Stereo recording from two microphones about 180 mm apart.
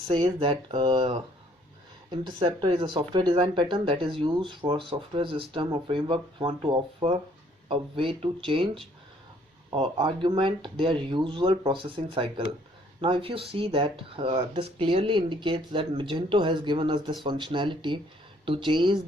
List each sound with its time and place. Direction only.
0.1 s speech: 30° right (ahead or behind)